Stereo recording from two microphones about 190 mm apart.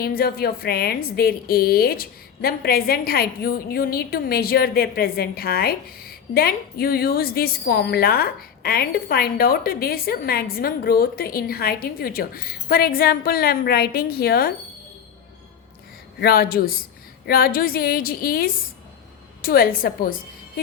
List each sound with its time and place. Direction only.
0.0 s a woman's voice: 55° left (ahead or behind)
16.2 s a woman's voice: 55° left (ahead or behind)